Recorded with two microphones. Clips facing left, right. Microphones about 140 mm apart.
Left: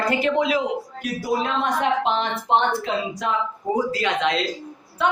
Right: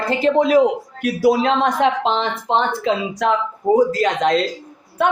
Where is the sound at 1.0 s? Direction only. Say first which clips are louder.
Right 10 dB; 75° right (ahead or behind).